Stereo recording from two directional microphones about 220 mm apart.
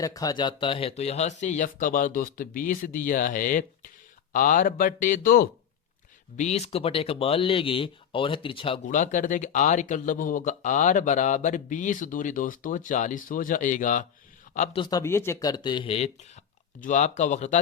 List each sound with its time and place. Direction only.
0.0 s speech: 15° left (ahead or behind); by 5.5 s 40° left (ahead or behind)
6.3 s a man's voice: 30° left (ahead or behind)
14.8 s speech: 15° left (ahead or behind); by 17.6 s 35° left (ahead or behind)